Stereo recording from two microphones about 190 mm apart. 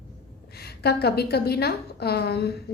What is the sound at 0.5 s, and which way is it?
A woman's voice, 55° left (ahead or behind).